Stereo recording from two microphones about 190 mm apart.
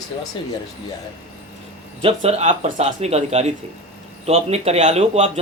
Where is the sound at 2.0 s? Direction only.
35° right (ahead or behind).